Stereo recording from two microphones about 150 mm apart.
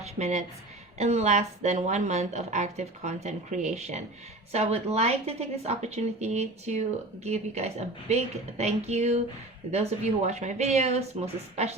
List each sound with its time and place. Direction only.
0.0 s speech: 50° right (ahead or behind)